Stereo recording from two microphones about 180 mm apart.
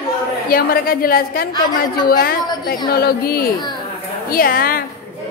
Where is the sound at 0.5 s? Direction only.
55° left (ahead or behind).